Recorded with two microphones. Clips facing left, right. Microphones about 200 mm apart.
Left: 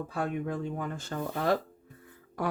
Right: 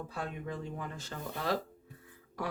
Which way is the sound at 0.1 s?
55° left (ahead or behind).